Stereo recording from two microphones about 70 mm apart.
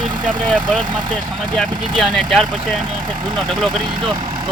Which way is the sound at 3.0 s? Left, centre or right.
Right.